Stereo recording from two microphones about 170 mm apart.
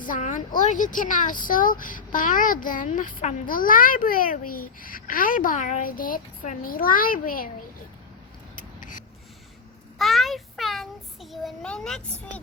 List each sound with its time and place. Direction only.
0.0 s speech: 50° left (ahead or behind)
8.8 s rub: 50° left (ahead or behind)
10.0 s child singing: centre (ahead or behind)